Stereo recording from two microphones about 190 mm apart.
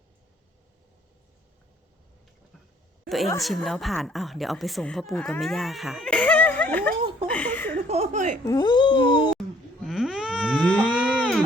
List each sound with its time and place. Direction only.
3.4 s speech: centre (ahead or behind)
7.3 s a sound: 10° left (ahead or behind)
7.9 s speech: 35° right (ahead or behind)
8.4 s speech: 20° left (ahead or behind)
9.8 s livestock: centre (ahead or behind)